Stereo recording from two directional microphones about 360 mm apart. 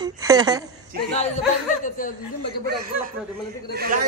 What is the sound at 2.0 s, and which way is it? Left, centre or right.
Speech, left.